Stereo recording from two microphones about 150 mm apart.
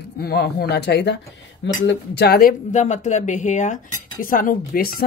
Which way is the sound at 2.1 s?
90° left.